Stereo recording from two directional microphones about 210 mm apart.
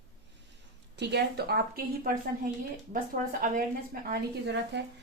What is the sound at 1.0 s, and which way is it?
A woman's voice, 50° right (ahead or behind).